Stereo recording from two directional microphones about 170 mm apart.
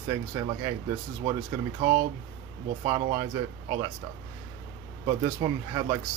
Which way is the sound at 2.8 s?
25° right (ahead or behind).